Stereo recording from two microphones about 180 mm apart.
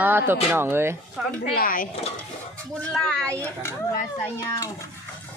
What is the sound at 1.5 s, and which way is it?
Speech, 50° left (ahead or behind).